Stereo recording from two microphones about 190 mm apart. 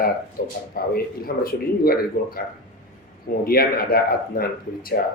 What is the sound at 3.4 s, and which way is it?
Speech, 50° left (ahead or behind).